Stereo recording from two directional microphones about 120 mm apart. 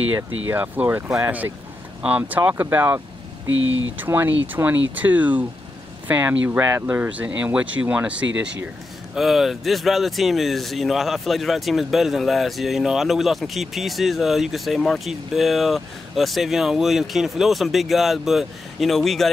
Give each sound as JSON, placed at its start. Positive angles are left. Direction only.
{"t": 0.1, "sound": "speech", "side_deg": -15}